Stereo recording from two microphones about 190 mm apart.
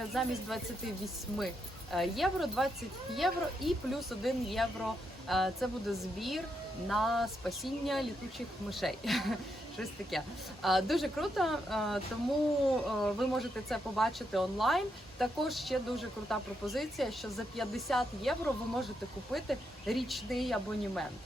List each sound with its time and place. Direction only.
0.1 s speech: centre (ahead or behind)
1.9 s speech: centre (ahead or behind)